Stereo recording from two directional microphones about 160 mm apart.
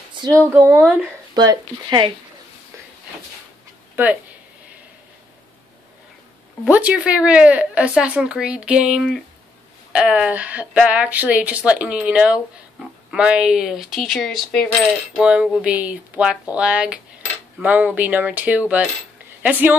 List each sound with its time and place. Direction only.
0.5 s a woman's voice: 15° right (ahead or behind)
1.3 s speech: 25° right (ahead or behind)
3.9 s a sound: 10° right (ahead or behind)
6.6 s a woman's voice: 5° right (ahead or behind)